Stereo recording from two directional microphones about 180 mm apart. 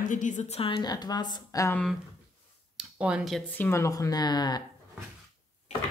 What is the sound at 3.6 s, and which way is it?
A woman's voice, 15° left (ahead or behind).